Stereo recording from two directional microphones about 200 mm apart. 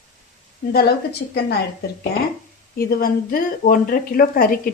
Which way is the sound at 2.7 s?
50° left (ahead or behind).